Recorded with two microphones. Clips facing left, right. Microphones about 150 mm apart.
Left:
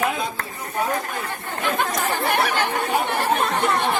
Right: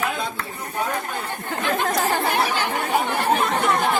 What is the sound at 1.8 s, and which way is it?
Speech, centre (ahead or behind).